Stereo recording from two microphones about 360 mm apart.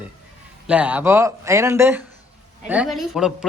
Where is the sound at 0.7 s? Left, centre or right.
Centre.